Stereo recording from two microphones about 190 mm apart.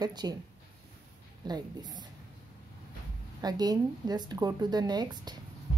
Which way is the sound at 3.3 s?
20° right (ahead or behind).